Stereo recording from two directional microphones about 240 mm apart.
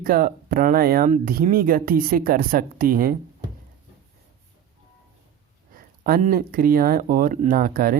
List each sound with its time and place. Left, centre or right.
0.0 s speech: right
5.7 s speech: right